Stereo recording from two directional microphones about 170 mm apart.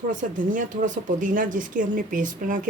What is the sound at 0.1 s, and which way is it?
Speech, 50° right (ahead or behind).